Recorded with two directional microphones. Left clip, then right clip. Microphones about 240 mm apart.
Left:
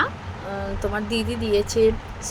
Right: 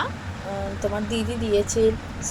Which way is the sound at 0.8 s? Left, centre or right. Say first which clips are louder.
Left 1 dB; centre.